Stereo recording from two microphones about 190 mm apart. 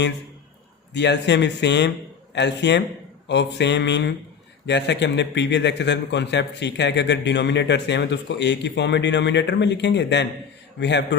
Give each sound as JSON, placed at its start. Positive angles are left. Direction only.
{"t": 0.9, "sound": "a man's voice", "side_deg": 65}